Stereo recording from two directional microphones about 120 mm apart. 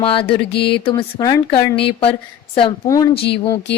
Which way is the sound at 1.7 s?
50° left (ahead or behind).